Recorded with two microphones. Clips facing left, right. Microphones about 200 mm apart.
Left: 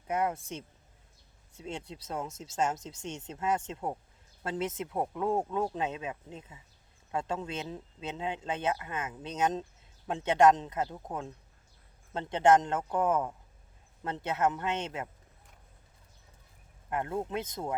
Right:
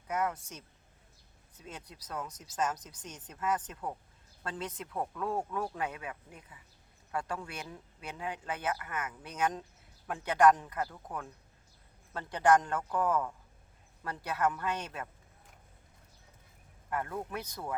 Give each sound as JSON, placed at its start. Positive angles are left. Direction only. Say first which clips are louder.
{"t": 0.1, "sound": "speech", "louder": "left 3 dB", "side_deg": 25}
{"t": 16.9, "sound": "speech", "louder": "left 4 dB", "side_deg": 25}